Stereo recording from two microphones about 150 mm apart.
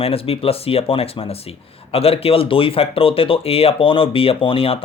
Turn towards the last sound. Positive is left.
turn(degrees=40)  # may be behind; listen again after turning